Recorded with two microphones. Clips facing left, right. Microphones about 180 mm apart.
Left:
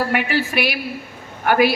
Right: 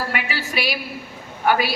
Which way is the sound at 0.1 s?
55° left (ahead or behind).